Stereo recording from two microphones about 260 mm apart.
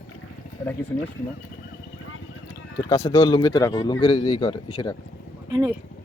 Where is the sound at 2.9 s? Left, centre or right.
Centre.